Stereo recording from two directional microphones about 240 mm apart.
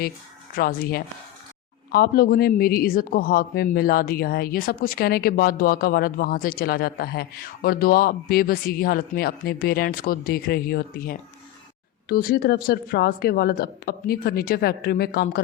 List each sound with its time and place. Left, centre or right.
0.5 s a man's voice: left